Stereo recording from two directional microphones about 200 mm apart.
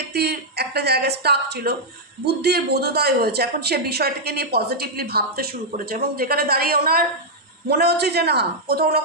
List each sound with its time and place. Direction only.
0.1 s speech: 55° right (ahead or behind)